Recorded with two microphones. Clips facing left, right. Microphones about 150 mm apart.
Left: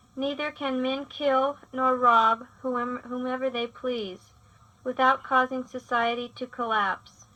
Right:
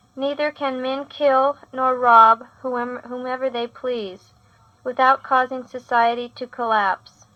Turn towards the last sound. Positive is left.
turn(degrees=-70)  # may be behind; listen again after turning